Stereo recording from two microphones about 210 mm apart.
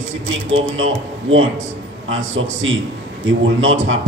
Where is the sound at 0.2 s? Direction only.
65° right (ahead or behind).